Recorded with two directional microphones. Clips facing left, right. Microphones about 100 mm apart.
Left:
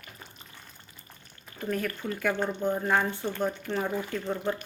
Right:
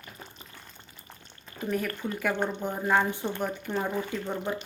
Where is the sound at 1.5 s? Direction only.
10° right (ahead or behind).